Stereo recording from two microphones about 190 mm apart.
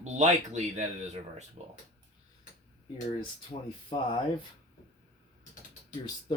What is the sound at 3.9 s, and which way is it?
Speech, 25° left (ahead or behind).